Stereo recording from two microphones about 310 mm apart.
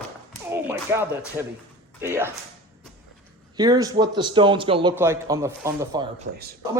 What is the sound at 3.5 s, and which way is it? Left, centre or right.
A man's voice, centre.